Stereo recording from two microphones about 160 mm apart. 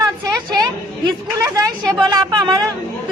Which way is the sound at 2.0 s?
25° right (ahead or behind).